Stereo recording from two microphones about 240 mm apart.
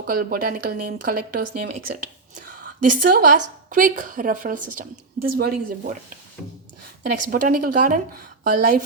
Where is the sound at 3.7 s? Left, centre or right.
Right.